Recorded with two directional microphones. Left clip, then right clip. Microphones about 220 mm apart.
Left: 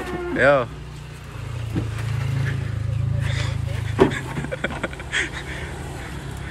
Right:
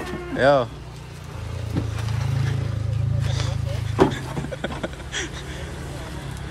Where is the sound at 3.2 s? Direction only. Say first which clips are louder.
Left 2 dB; 20° right (ahead or behind).